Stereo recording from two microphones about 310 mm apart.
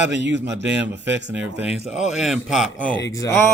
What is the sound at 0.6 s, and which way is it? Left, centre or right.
A man's voice, centre.